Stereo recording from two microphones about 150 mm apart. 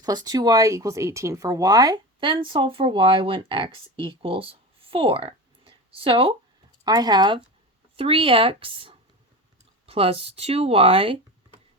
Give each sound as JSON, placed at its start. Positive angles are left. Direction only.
{"t": 0.0, "sound": "speech", "side_deg": -25}